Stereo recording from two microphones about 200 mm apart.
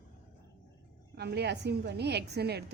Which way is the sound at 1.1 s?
55° right (ahead or behind).